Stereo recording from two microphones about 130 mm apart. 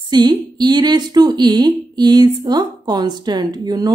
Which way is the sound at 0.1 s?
35° right (ahead or behind).